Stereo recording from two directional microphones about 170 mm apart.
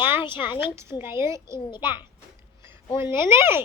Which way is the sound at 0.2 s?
30° left (ahead or behind).